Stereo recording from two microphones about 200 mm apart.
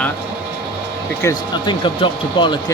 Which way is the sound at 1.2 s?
25° left (ahead or behind).